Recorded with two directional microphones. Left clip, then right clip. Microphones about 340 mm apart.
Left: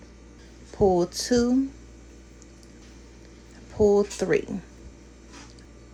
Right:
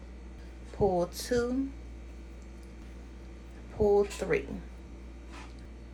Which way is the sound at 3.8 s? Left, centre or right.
Left.